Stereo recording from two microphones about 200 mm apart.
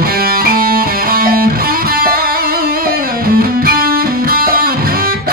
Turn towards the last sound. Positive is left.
turn(degrees=-45)  # may be behind; listen again after turning